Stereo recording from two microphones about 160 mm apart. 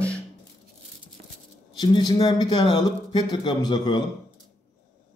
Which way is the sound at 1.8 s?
25° left (ahead or behind).